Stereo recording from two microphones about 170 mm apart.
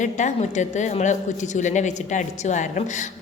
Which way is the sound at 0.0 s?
45° left (ahead or behind).